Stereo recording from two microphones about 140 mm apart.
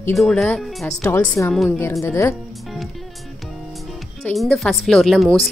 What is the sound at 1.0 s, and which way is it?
Speech, 15° left (ahead or behind).